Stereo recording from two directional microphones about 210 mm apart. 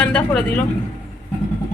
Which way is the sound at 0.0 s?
5° left (ahead or behind).